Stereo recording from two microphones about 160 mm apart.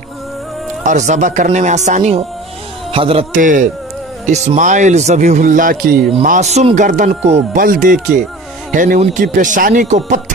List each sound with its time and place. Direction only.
0.8 s speech: 50° right (ahead or behind)
2.9 s a man's voice: 35° right (ahead or behind)
3.3 s speech: 55° right (ahead or behind)
7.6 s speech: 55° right (ahead or behind)